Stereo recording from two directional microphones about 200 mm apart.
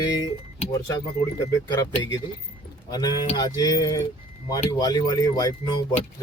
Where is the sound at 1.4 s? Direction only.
20° left (ahead or behind).